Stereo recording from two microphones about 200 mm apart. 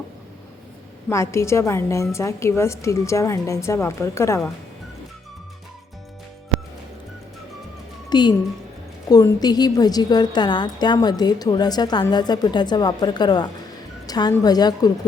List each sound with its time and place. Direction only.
1.1 s a woman's voice: 15° left (ahead or behind)
8.1 s a woman's voice: 20° left (ahead or behind)